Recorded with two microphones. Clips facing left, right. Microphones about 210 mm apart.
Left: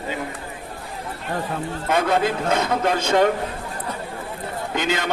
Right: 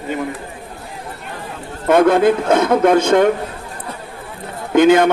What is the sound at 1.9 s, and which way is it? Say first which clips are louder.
A man's voice: right 9 dB; 50° right (ahead or behind).